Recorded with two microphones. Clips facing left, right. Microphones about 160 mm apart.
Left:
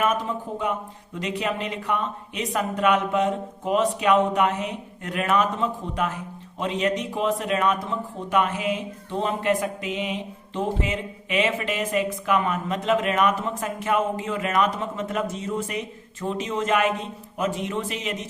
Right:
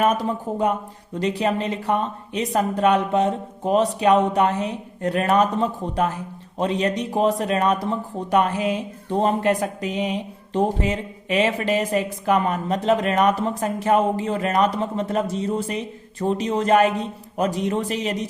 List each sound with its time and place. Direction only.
0.0 s speech: 35° right (ahead or behind)